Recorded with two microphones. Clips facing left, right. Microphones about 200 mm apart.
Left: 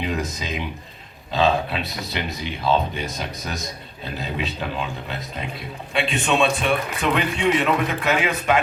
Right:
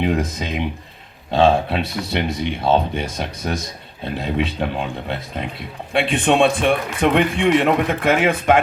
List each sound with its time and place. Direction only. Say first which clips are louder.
0.0 s speech: right 6 dB; 55° right (ahead or behind)